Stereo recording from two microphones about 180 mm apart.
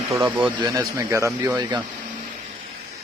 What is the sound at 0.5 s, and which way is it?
Speech, 20° right (ahead or behind).